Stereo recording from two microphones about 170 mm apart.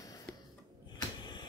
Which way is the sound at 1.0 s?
25° left (ahead or behind).